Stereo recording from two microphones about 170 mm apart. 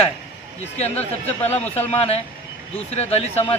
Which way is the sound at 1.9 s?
35° left (ahead or behind).